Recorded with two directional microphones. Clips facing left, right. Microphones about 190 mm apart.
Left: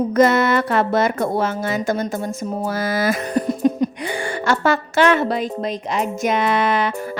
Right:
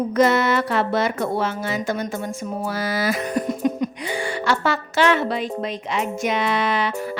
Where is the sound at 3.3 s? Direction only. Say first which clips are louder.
Left 4 dB; 35° left (ahead or behind).